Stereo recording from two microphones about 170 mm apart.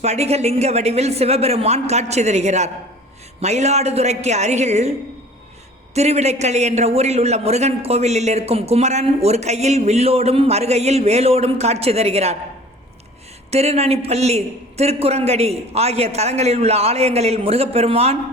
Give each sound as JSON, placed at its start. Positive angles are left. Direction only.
{"t": 0.0, "sound": "a man's voice", "side_deg": -40}
{"t": 13.5, "sound": "a man's voice", "side_deg": -40}